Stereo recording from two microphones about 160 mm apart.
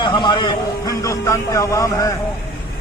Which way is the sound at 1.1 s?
20° left (ahead or behind).